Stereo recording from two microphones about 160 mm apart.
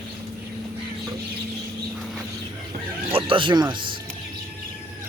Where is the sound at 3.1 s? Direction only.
35° right (ahead or behind).